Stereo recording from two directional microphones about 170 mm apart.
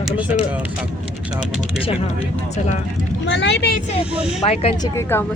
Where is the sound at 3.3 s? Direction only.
90° left.